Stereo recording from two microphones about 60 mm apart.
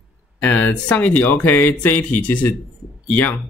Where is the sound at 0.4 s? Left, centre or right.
Left.